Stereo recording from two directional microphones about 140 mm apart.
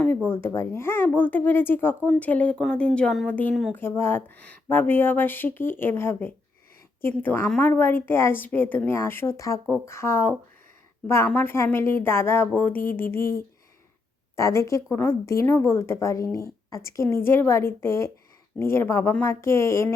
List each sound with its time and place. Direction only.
0.0 s speech: 15° left (ahead or behind)
3.5 s speech: centre (ahead or behind)
3.8 s a woman's voice: 15° left (ahead or behind)
13.1 s speech: 90° left
14.3 s a woman's voice: 20° left (ahead or behind)